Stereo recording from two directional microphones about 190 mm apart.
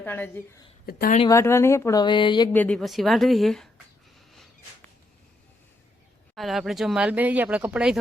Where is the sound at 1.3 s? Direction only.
15° left (ahead or behind).